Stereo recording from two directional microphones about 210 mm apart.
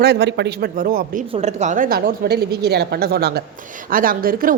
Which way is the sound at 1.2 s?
30° right (ahead or behind).